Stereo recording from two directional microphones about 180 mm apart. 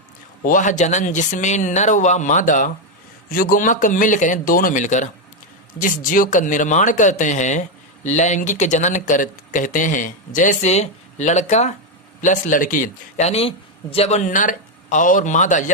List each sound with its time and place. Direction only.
0.4 s speech: 45° left (ahead or behind)